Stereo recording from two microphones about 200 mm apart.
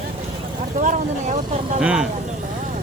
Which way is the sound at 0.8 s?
40° right (ahead or behind).